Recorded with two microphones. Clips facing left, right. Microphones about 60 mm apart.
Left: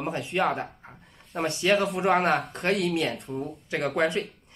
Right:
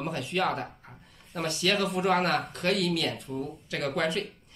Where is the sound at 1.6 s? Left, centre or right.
Left.